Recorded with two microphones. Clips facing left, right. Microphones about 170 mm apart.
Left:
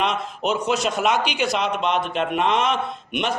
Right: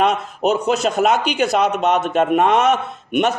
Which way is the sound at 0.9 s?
40° right (ahead or behind).